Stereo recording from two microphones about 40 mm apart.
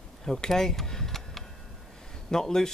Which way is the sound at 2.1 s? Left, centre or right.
Centre.